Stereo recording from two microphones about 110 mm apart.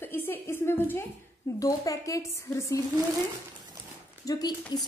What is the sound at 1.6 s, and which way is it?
A woman's voice, 30° left (ahead or behind).